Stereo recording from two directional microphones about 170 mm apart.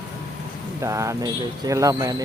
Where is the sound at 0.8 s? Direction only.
20° right (ahead or behind).